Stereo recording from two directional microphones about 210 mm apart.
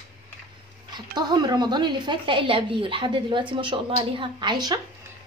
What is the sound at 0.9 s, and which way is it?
A woman's voice, 20° right (ahead or behind).